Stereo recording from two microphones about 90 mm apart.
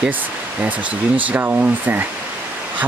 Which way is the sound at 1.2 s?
20° right (ahead or behind).